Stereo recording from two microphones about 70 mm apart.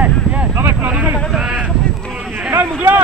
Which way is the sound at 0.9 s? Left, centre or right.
Right.